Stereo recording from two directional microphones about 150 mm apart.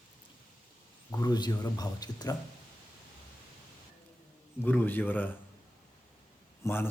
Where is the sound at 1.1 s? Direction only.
25° left (ahead or behind).